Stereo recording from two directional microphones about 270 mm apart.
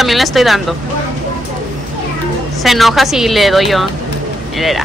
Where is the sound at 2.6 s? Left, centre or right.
Centre.